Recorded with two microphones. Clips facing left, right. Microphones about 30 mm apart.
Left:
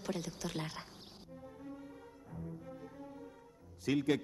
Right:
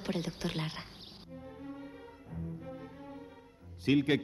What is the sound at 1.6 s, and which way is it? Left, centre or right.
Music, right.